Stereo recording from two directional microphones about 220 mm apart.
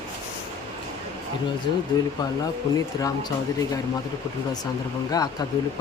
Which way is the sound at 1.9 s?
15° left (ahead or behind).